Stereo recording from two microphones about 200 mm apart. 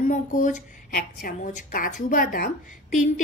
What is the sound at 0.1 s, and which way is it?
A woman's voice, 40° left (ahead or behind).